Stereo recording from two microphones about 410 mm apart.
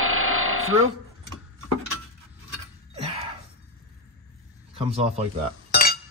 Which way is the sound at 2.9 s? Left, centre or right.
Centre.